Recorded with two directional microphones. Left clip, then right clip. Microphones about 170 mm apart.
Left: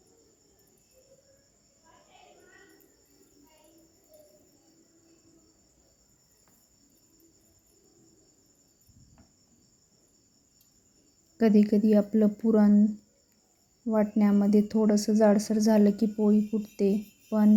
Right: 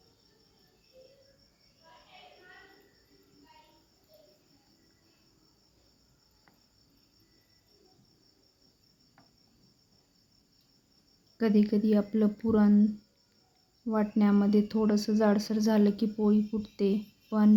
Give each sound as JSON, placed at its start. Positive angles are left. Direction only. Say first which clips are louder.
{"t": 11.3, "sound": "speech", "louder": "left 4 dB", "side_deg": 30}
{"t": 13.9, "sound": "speech", "louder": "left 2 dB", "side_deg": 20}
{"t": 16.1, "sound": "speech", "louder": "left 2 dB", "side_deg": 10}
{"t": 16.6, "sound": "speech", "louder": "left 3 dB", "side_deg": 20}